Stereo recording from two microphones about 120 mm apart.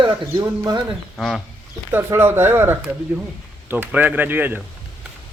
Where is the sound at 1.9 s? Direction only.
15° right (ahead or behind).